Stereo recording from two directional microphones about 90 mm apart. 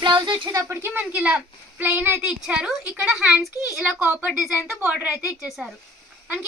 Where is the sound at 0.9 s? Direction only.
15° right (ahead or behind).